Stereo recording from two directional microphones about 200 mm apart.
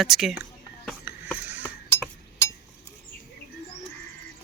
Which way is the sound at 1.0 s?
10° right (ahead or behind).